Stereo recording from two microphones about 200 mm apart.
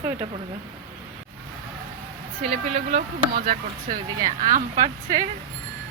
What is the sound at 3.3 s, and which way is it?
Speech, 45° right (ahead or behind).